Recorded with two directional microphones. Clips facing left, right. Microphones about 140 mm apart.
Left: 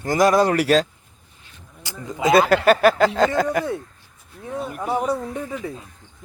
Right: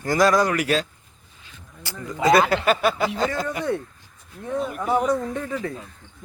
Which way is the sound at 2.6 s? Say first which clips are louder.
Left 5 dB; 45° left (ahead or behind).